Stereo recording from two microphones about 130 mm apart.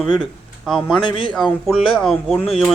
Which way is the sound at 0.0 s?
5° right (ahead or behind).